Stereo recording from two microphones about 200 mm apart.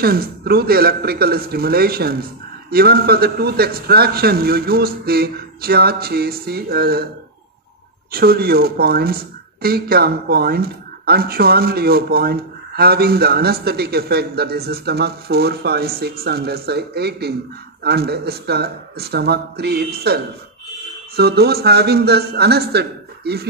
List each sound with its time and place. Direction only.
0.0 s speech: 50° right (ahead or behind)
8.1 s speech: 50° right (ahead or behind)
21.2 s speech: 55° right (ahead or behind)